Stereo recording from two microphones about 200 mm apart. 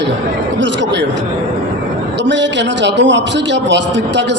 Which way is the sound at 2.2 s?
65° right (ahead or behind).